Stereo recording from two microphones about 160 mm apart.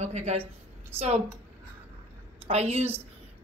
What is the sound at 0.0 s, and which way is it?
A woman's voice, 45° right (ahead or behind).